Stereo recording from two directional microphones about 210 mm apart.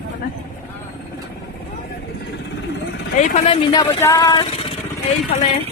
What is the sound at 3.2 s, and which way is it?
Speech, 30° left (ahead or behind).